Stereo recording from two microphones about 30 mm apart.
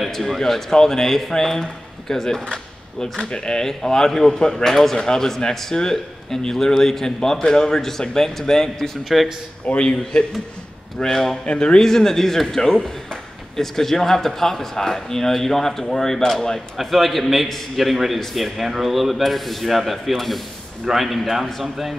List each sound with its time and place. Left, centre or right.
0.1 s speech: centre
3.3 s a man's voice: left
3.6 s a man's voice: centre
4.6 s a man's voice: centre
9.8 s a man's voice: left
11.0 s speech: centre
11.4 s a man's voice: left
11.8 s speech: centre
16.8 s a man's voice: centre